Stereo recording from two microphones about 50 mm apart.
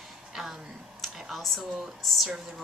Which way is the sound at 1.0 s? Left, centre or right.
Centre.